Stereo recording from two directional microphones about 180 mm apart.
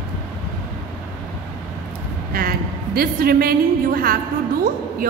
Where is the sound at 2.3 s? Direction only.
55° right (ahead or behind).